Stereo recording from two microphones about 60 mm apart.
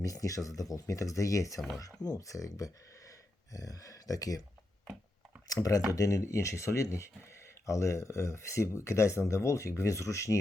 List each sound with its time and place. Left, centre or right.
0.0 s speech: left
3.5 s speech: left
6.0 s speech: left
6.2 s speech: left